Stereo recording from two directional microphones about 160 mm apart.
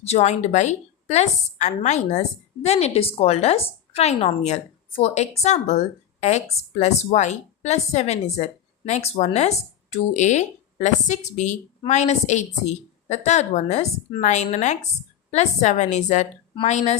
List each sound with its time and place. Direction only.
0.0 s speech: 40° left (ahead or behind)